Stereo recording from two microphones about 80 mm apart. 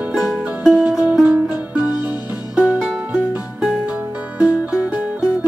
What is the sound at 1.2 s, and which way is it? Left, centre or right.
Music, centre.